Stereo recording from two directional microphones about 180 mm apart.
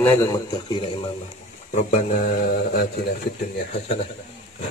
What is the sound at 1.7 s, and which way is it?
Speech, 45° left (ahead or behind).